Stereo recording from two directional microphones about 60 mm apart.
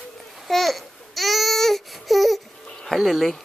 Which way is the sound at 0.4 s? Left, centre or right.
Centre.